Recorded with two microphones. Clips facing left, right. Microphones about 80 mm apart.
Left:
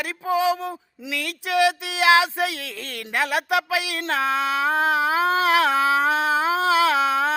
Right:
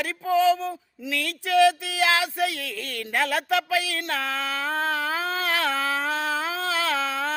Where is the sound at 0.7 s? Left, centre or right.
Centre.